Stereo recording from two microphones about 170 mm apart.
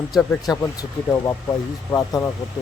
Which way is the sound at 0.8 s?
20° left (ahead or behind).